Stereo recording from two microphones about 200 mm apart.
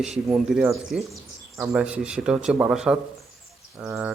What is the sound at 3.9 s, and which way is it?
Frog, 15° right (ahead or behind).